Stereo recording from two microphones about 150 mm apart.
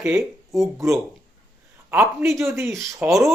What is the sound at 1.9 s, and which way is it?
Speech, 15° right (ahead or behind).